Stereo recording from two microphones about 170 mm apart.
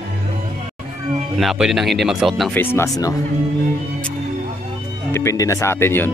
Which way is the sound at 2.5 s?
15° left (ahead or behind).